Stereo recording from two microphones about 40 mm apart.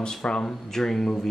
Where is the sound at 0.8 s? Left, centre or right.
Centre.